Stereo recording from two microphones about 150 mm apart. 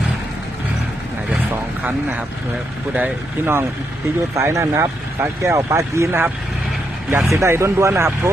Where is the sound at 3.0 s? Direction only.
15° right (ahead or behind).